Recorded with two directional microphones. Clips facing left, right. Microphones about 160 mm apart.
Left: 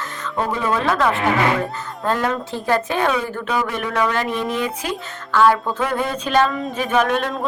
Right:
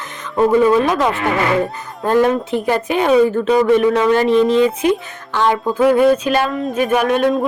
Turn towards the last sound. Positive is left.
turn(degrees=-5)  # may be behind; listen again after turning